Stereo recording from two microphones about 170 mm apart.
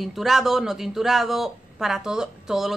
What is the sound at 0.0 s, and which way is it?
Speech, centre (ahead or behind).